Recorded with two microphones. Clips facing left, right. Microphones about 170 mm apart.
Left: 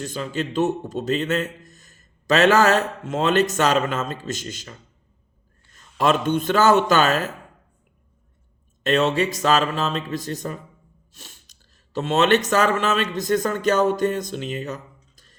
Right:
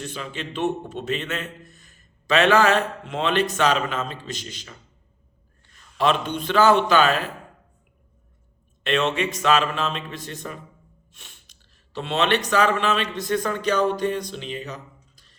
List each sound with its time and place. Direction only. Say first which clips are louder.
0.0 s a man's voice: left 5 dB; 40° left (ahead or behind)
5.7 s a man's voice: left 1 dB; 45° left (ahead or behind)
8.8 s speech: left 3 dB; 40° left (ahead or behind)
11.1 s sneeze: left 5 dB; 40° left (ahead or behind)
11.9 s a man's voice: left 4 dB; 45° left (ahead or behind)